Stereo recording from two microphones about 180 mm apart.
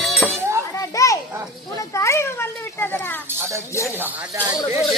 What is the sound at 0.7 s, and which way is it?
Children playing, 15° left (ahead or behind).